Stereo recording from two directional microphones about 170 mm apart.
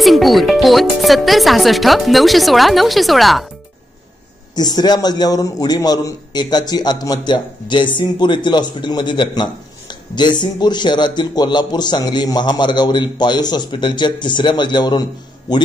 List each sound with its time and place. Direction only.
0.0 s speech: centre (ahead or behind)
4.6 s a man's voice: 25° left (ahead or behind)